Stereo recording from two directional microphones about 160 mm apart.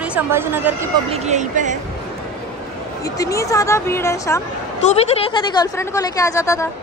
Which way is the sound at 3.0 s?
20° left (ahead or behind).